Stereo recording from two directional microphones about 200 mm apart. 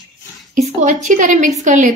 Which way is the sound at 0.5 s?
40° right (ahead or behind).